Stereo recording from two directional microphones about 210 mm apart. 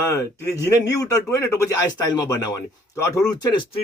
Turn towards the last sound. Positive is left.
turn(degrees=20)  # may be behind; listen again after turning